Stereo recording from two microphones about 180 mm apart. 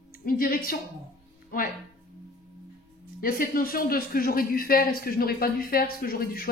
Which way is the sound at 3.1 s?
50° left (ahead or behind).